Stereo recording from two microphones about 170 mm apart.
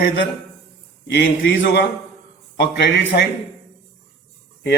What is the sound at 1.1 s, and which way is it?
Speech, 85° left.